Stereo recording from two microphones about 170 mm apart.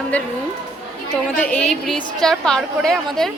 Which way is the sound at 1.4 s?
5° left (ahead or behind).